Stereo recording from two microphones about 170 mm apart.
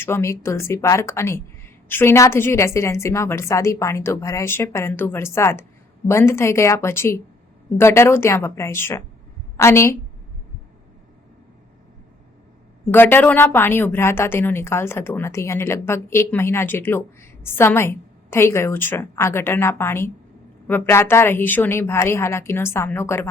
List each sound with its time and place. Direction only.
0.0 s a woman's voice: 15° left (ahead or behind)
12.9 s a woman's voice: 10° left (ahead or behind)